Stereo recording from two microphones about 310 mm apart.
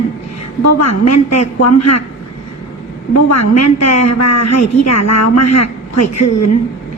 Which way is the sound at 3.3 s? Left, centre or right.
Left.